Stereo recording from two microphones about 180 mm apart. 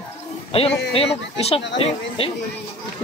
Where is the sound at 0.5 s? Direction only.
30° left (ahead or behind).